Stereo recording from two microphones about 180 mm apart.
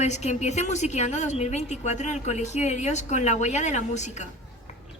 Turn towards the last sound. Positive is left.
turn(degrees=40)  # may be behind; listen again after turning